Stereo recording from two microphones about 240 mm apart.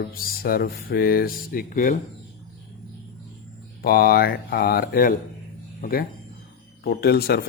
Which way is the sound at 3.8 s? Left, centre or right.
Left.